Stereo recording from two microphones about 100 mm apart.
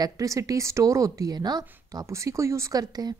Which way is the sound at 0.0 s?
35° right (ahead or behind).